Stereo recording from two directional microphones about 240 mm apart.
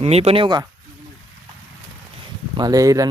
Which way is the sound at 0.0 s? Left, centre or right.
Right.